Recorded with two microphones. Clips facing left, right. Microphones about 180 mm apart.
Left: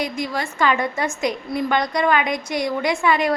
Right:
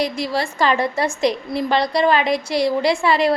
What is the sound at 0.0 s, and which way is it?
A woman's voice, 35° right (ahead or behind).